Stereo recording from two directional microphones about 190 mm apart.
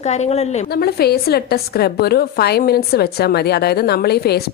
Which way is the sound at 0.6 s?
55° left (ahead or behind).